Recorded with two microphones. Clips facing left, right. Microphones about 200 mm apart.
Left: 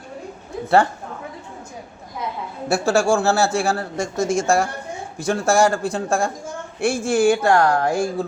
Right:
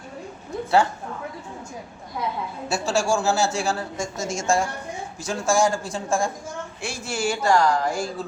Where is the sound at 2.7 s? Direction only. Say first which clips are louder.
Left 5 dB; 60° left (ahead or behind).